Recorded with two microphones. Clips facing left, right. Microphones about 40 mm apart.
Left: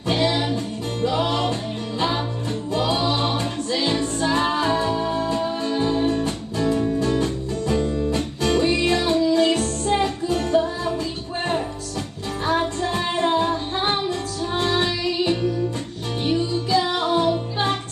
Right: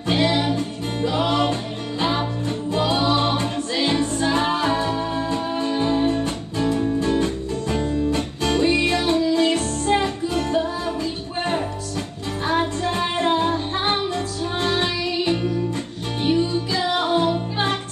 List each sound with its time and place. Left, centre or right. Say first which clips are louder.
0.1 s music: right 1 dB; centre
12.4 s music: even; centre